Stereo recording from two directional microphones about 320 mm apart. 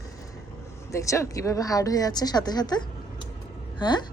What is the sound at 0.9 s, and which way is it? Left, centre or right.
Speech, centre.